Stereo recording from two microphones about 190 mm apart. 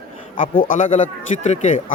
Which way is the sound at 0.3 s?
45° left (ahead or behind).